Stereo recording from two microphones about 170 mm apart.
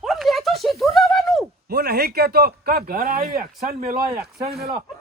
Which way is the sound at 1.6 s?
65° right (ahead or behind).